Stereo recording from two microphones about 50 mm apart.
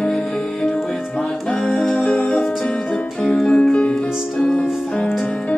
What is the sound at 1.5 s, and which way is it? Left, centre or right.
Music, centre.